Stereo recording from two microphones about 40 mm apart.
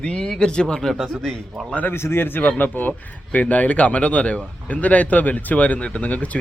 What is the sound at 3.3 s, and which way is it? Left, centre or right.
Speech, left.